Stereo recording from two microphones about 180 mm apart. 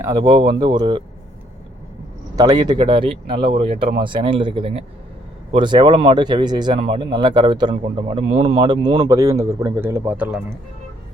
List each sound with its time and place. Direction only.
0.0 s speech: 25° right (ahead or behind)
2.3 s speech: 20° right (ahead or behind)